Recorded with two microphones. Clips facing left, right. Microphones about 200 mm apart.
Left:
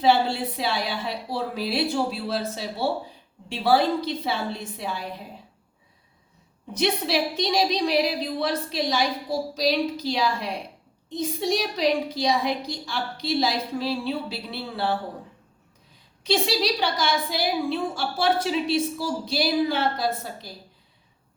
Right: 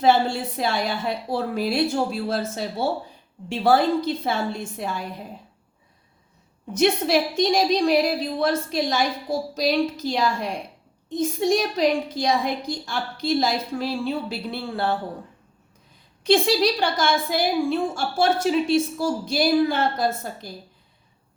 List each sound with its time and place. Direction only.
0.0 s a woman's voice: 45° right (ahead or behind)
6.7 s a woman's voice: 50° right (ahead or behind)
16.2 s a woman's voice: 50° right (ahead or behind)